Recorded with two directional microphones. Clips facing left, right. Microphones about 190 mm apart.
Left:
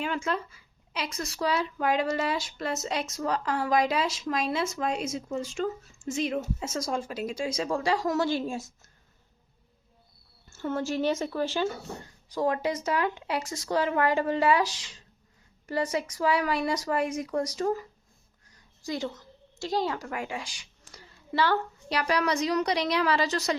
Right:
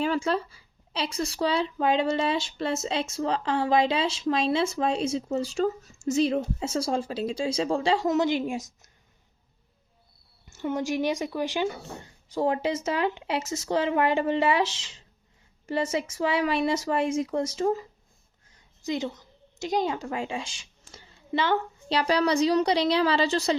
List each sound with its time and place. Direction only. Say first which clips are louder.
0.0 s a woman's voice: right 5 dB; 35° right (ahead or behind); by 8.9 s 15° right (ahead or behind)
10.5 s a woman's voice: right 2 dB; 15° right (ahead or behind)